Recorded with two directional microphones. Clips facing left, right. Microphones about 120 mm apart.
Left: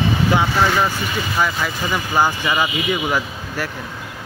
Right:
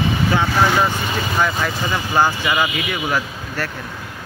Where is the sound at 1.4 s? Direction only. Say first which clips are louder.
Right 1 dB; 5° left (ahead or behind).